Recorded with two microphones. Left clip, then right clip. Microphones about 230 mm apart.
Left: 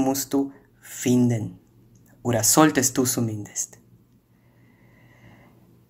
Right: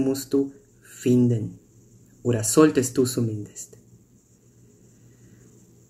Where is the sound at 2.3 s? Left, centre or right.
Left.